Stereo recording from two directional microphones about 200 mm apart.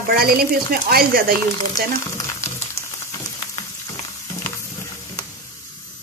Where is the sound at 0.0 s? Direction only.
45° right (ahead or behind).